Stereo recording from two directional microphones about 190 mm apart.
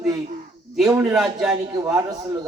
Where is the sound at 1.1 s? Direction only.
5° right (ahead or behind).